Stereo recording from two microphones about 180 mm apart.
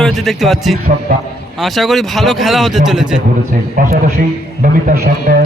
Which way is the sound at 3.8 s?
50° right (ahead or behind).